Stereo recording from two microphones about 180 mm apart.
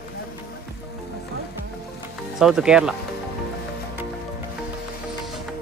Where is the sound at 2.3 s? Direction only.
5° right (ahead or behind).